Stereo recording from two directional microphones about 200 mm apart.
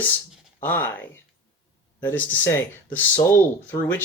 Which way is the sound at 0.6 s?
10° left (ahead or behind).